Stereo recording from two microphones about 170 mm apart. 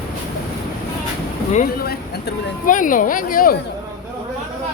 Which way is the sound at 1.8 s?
65° left (ahead or behind).